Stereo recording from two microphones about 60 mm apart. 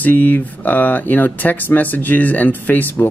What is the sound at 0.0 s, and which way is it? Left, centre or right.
Speech, left.